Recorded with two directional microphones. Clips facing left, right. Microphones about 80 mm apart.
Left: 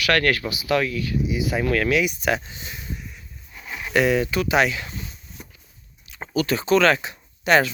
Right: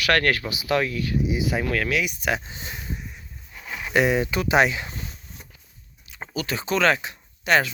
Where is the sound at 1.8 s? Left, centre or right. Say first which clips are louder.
Left 4 dB; centre.